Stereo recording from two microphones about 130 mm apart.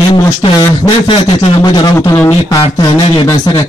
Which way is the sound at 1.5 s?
30° left (ahead or behind).